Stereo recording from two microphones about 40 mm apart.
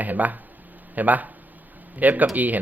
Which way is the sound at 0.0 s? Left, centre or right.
Right.